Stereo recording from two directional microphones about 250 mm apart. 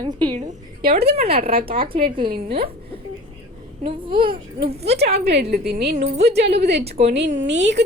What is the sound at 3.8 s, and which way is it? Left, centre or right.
A child's voice, right.